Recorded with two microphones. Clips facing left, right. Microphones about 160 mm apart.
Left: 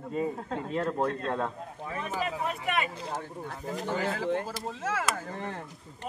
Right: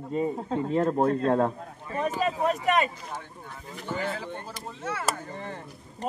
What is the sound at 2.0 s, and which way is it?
Speech, 40° right (ahead or behind).